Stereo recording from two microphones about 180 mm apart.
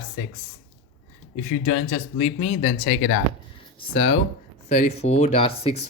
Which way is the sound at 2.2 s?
35° left (ahead or behind).